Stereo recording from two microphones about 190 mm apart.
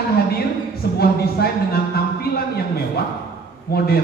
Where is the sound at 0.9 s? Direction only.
55° left (ahead or behind).